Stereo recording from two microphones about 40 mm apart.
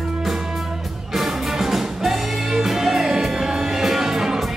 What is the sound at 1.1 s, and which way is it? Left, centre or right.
Music, centre.